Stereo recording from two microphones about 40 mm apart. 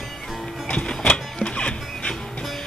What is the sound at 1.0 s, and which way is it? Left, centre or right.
Music, left.